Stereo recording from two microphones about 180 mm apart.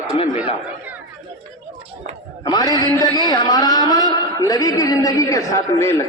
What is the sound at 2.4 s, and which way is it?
A man's voice, 20° left (ahead or behind).